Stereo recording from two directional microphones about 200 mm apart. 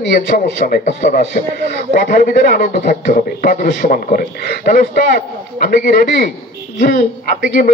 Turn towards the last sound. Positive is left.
turn(degrees=45)  # may be behind; listen again after turning